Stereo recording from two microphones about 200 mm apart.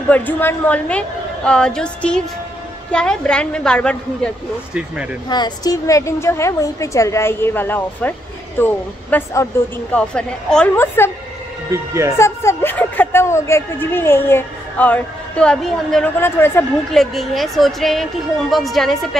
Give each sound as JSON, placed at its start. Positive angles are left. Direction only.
{"t": 0.1, "sound": "a woman's voice", "side_deg": 10}
{"t": 5.3, "sound": "a woman's voice", "side_deg": 20}
{"t": 11.7, "sound": "speech", "side_deg": -15}
{"t": 12.2, "sound": "a woman's voice", "side_deg": 10}